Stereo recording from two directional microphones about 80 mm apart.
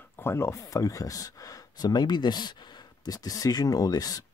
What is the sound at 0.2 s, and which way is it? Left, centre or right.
Speech, left.